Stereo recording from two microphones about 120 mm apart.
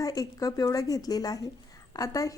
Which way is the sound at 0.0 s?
30° left (ahead or behind).